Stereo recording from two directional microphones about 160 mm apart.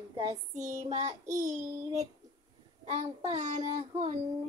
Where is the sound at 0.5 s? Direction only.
50° right (ahead or behind).